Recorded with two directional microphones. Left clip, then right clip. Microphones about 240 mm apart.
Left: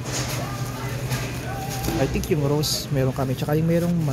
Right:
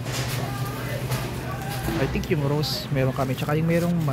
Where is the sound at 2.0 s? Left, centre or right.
Left.